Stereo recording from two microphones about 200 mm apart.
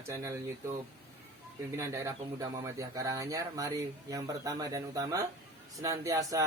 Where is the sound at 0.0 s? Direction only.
15° right (ahead or behind).